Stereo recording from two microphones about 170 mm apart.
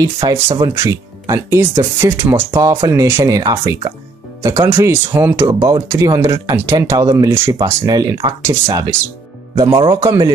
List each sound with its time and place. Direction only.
0.0 s speech: 20° right (ahead or behind)
5.5 s speech: 25° right (ahead or behind)